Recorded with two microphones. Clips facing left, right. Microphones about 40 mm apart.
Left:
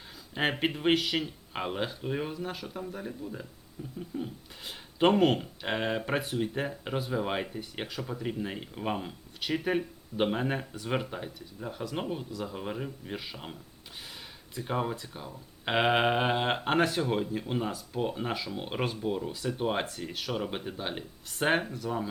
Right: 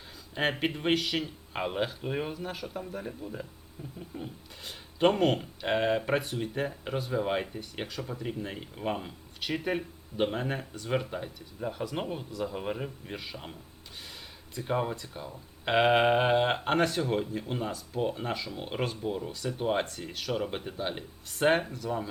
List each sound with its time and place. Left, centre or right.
0.3 s speech: centre
4.6 s speech: centre
11.6 s speech: centre
13.1 s speech: centre